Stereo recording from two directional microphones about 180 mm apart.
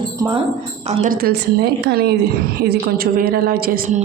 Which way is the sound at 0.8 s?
40° right (ahead or behind).